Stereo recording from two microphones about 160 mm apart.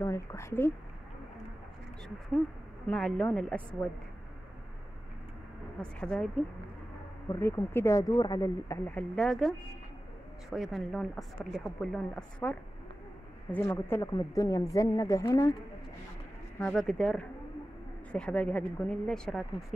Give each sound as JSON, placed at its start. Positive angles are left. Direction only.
{"t": 0.0, "sound": "speech", "side_deg": 20}
{"t": 2.9, "sound": "speech", "side_deg": 5}
{"t": 5.8, "sound": "speech", "side_deg": 5}
{"t": 7.2, "sound": "a woman's voice", "side_deg": 20}
{"t": 10.5, "sound": "a woman's voice", "side_deg": 0}
{"t": 16.5, "sound": "speech", "side_deg": 5}